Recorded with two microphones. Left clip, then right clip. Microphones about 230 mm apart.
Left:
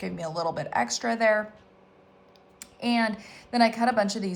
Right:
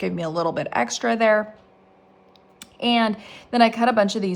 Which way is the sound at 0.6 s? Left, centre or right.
Right.